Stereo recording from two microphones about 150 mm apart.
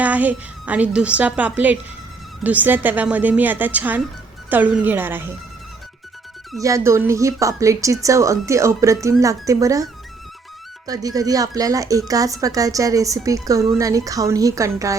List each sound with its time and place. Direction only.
0.0 s a woman's voice: 10° right (ahead or behind)
6.6 s speech: 20° right (ahead or behind)
10.8 s speech: 25° right (ahead or behind)